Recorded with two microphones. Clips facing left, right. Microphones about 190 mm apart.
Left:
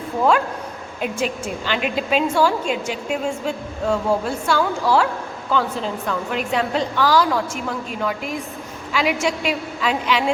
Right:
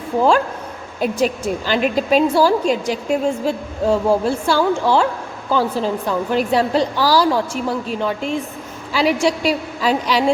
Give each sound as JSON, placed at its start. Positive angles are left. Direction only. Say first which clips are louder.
{"t": 0.9, "sound": "a woman's voice", "louder": "right 5 dB", "side_deg": -40}